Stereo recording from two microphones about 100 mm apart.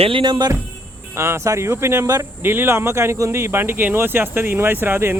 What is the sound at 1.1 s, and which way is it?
Speech, 30° right (ahead or behind).